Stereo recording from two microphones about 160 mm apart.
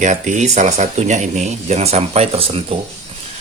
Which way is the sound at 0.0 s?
50° right (ahead or behind).